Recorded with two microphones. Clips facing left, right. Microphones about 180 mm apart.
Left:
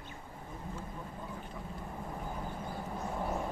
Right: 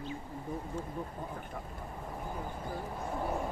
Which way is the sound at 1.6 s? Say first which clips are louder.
Right 1 dB; 55° right (ahead or behind).